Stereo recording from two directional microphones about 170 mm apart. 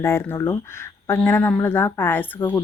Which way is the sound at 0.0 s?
15° left (ahead or behind).